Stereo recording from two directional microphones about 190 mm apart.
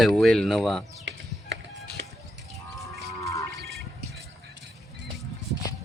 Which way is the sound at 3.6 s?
Centre (ahead or behind).